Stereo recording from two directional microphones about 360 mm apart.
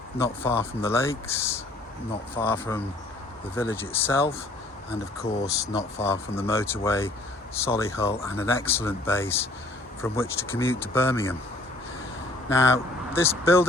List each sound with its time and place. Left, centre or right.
0.2 s speech: centre
5.7 s speech: centre
12.5 s speech: centre